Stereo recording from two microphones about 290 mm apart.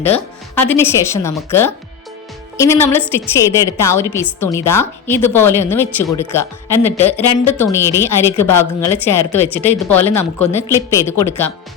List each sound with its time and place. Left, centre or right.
0.0 s a woman's voice: centre
6.9 s speech: left
7.6 s a woman's voice: centre